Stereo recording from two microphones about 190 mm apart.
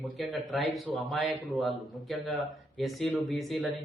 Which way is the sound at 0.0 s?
Centre (ahead or behind).